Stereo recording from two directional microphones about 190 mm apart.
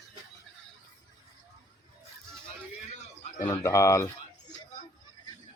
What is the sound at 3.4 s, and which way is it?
Speech, 15° left (ahead or behind).